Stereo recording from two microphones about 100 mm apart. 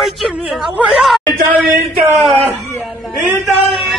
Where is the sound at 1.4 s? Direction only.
20° right (ahead or behind).